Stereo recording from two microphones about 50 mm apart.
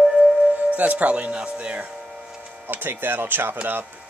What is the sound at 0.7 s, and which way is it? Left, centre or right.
Music, right.